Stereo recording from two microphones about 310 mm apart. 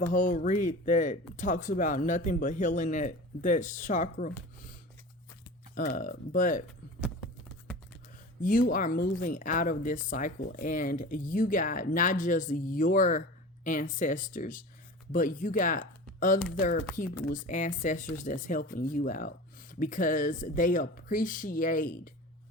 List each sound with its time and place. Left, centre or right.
0.1 s speech: left
6.0 s speech: left
8.4 s speech: left